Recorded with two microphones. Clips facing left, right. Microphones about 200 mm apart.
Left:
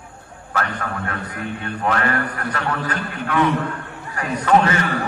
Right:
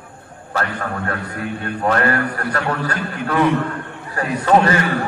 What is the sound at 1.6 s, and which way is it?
A man's voice, 40° right (ahead or behind).